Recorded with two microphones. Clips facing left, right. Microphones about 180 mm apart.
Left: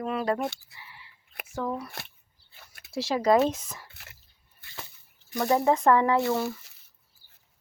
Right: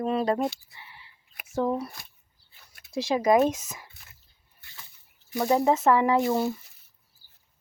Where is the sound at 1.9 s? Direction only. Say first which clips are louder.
Left 5 dB; 70° left (ahead or behind).